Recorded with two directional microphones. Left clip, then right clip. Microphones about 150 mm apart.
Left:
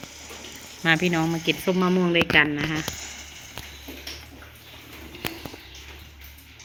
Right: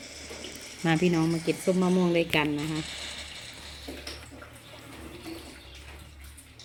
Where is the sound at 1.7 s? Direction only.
10° left (ahead or behind).